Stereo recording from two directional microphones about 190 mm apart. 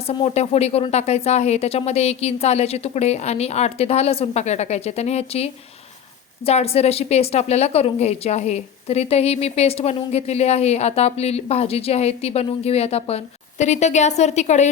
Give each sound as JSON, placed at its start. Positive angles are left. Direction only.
{"t": 0.1, "sound": "a woman's voice", "side_deg": 30}